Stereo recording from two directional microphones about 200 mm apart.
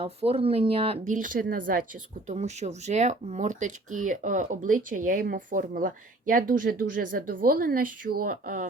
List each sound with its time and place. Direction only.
0.0 s speech: 30° right (ahead or behind)